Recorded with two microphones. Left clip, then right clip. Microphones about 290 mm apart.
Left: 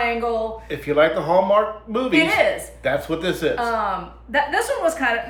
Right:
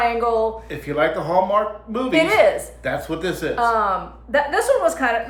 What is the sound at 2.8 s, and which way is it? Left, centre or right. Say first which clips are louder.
Speech: left 2 dB; centre.